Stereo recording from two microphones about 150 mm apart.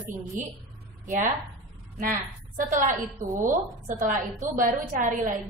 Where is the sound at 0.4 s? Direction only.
60° right (ahead or behind).